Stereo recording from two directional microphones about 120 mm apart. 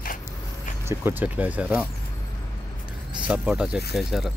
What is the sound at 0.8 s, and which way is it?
Speech, 20° right (ahead or behind).